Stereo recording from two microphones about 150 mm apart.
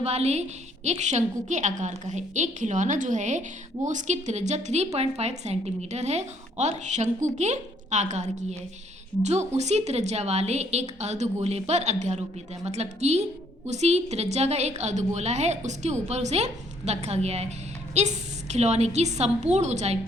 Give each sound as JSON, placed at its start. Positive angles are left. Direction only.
{"t": 0.0, "sound": "a woman's voice", "side_deg": -45}